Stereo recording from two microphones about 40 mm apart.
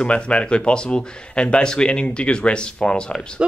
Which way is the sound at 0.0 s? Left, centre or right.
Left.